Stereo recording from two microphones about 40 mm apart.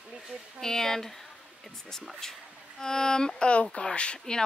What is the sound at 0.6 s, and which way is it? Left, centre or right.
Speech, centre.